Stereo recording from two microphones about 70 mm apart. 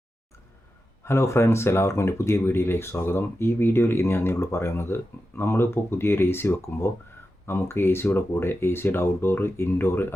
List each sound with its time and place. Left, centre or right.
1.0 s speech: left